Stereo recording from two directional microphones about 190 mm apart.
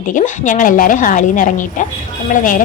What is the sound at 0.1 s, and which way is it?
A woman's voice, 40° left (ahead or behind).